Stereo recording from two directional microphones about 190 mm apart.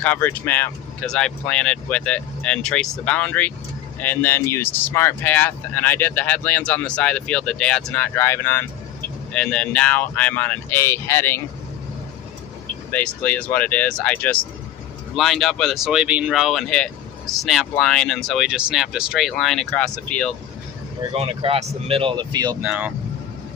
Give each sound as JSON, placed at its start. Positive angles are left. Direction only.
{"t": 0.0, "sound": "speech", "side_deg": 10}
{"t": 12.9, "sound": "speech", "side_deg": 10}
{"t": 21.1, "sound": "speech", "side_deg": -30}
{"t": 22.6, "sound": "speech", "side_deg": -5}